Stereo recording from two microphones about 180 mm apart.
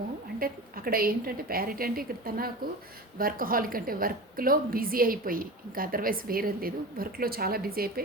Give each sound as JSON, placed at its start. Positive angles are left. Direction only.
{"t": 0.3, "sound": "a woman's voice", "side_deg": -55}